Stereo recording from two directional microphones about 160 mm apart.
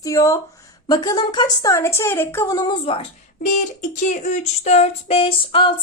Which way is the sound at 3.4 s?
55° left (ahead or behind).